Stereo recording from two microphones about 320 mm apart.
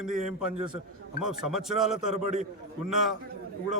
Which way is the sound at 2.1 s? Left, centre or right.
Right.